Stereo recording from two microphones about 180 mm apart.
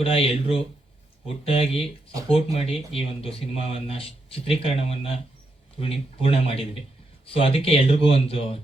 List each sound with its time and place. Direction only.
0.0 s speech: 30° left (ahead or behind)